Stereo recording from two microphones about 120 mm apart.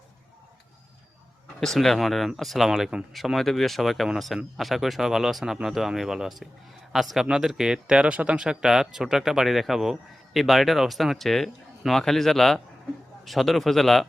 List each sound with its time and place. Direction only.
1.6 s speech: 5° left (ahead or behind)